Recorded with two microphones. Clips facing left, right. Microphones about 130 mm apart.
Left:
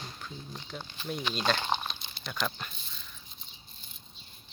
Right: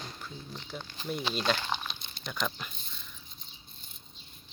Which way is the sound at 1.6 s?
30° left (ahead or behind).